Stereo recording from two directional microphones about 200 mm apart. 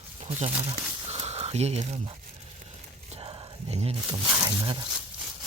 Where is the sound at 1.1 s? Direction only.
30° right (ahead or behind).